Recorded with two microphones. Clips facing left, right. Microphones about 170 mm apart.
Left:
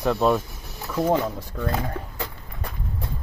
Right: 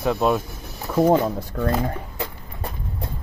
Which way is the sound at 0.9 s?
30° right (ahead or behind).